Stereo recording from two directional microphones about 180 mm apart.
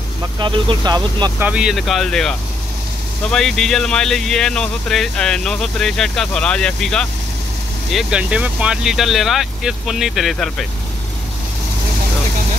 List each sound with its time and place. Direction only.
0.4 s speech: 25° right (ahead or behind)
1.4 s speech: 5° right (ahead or behind)